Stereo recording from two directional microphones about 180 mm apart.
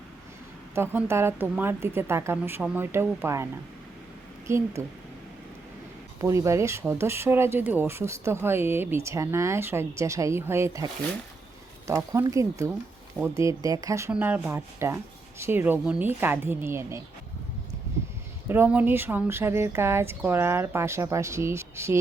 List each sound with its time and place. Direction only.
0.8 s speech: 15° right (ahead or behind)
4.4 s speech: 15° right (ahead or behind)
6.1 s speech: 15° right (ahead or behind)
11.9 s speech: 15° right (ahead or behind)
18.4 s speech: 10° right (ahead or behind)